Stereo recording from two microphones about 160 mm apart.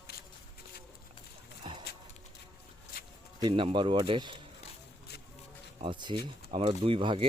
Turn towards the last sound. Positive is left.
turn(degrees=-30)  # may be behind; listen again after turning